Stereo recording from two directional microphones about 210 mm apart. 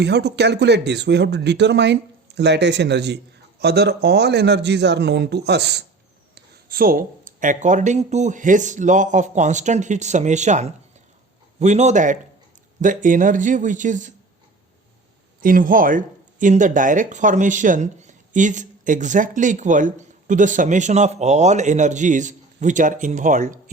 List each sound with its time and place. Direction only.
0.0 s a man's voice: 55° right (ahead or behind); by 14.1 s 35° right (ahead or behind)
15.4 s speech: 40° right (ahead or behind)